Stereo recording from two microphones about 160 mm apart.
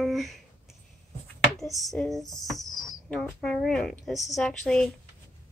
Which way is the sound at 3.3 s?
Centre (ahead or behind).